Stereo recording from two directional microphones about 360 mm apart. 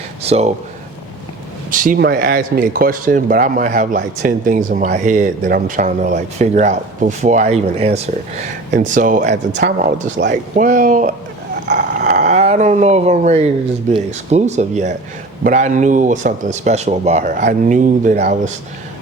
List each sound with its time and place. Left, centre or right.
0.2 s speech: centre
1.7 s speech: right
11.7 s a sound: right
13.9 s speech: centre